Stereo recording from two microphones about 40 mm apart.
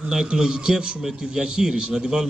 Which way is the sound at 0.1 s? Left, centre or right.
Centre.